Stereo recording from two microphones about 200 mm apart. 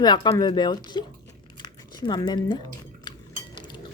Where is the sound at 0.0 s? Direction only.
20° left (ahead or behind).